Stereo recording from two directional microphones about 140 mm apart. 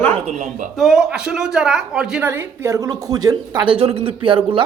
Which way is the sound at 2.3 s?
20° right (ahead or behind).